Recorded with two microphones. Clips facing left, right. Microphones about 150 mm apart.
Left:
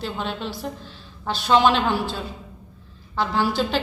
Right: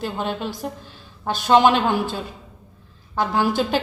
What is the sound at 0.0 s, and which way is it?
A woman's voice, 50° right (ahead or behind).